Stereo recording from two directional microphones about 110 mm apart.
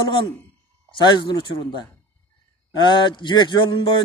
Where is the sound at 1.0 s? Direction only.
45° left (ahead or behind).